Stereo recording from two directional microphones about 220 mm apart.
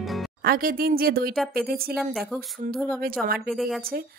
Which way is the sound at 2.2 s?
Centre (ahead or behind).